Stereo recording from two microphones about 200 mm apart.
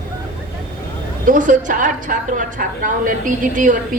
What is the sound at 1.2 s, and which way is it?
A woman's voice, 40° right (ahead or behind).